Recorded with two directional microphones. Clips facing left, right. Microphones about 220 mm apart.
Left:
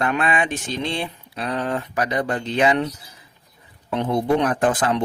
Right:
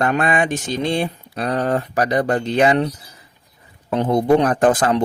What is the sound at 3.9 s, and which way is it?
Speech, 40° right (ahead or behind).